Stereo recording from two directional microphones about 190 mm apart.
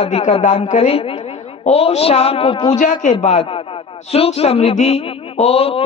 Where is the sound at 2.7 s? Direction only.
40° left (ahead or behind).